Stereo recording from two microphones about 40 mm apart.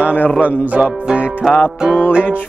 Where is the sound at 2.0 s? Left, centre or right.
Right.